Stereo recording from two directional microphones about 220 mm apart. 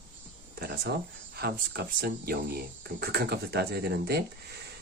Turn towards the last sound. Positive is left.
turn(degrees=-45)  # may be behind; listen again after turning